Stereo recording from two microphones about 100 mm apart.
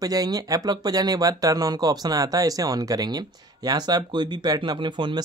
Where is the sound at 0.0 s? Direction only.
40° right (ahead or behind).